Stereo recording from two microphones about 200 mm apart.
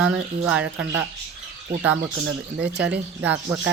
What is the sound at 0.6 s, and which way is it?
Speech, 65° right (ahead or behind).